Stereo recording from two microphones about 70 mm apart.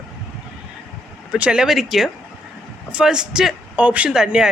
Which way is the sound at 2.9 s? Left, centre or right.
Centre.